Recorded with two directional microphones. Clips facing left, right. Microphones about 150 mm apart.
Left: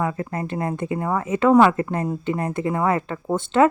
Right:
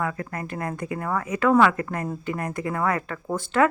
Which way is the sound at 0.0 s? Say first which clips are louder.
Left 4 dB; 25° left (ahead or behind).